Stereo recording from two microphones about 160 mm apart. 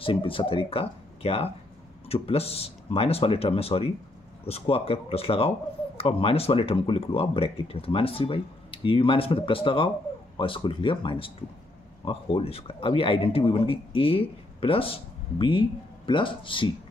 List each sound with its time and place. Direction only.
0.0 s speech: 35° left (ahead or behind)